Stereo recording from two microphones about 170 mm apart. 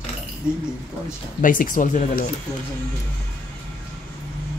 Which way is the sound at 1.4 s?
55° left (ahead or behind).